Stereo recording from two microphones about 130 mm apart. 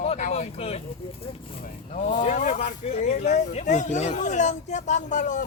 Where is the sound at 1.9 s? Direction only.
75° left (ahead or behind).